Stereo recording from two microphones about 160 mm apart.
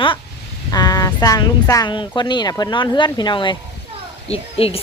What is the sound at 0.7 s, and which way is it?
A woman's voice, 25° left (ahead or behind).